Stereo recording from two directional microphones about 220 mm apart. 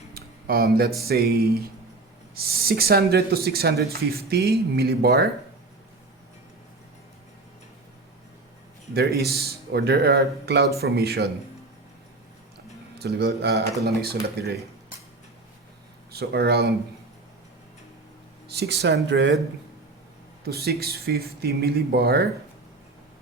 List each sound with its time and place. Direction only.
0.1 s a sound: 45° right (ahead or behind)
1.0 s speech: 45° right (ahead or behind)
8.9 s speech: 45° right (ahead or behind)
13.0 s speech: 45° right (ahead or behind)
16.1 s speech: 45° right (ahead or behind)
18.4 s speech: 45° right (ahead or behind)
20.4 s speech: 45° right (ahead or behind)